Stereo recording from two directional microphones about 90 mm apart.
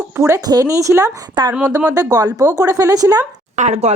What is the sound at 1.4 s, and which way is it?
Speech, 55° right (ahead or behind).